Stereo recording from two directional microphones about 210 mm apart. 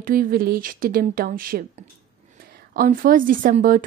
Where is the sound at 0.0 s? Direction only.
45° right (ahead or behind).